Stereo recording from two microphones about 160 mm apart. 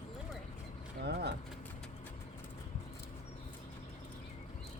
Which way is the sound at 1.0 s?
90° right.